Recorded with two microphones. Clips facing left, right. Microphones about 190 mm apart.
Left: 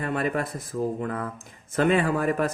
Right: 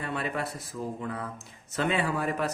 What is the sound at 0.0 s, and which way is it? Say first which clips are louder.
A man's voice: left 5 dB; 45° left (ahead or behind).